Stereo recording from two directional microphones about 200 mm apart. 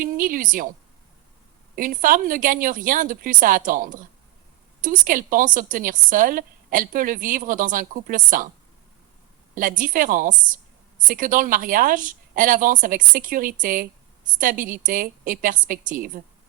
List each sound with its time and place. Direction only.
0.0 s a woman's voice: 45° right (ahead or behind)
1.7 s a woman's voice: 45° right (ahead or behind)
9.6 s a woman's voice: 45° right (ahead or behind)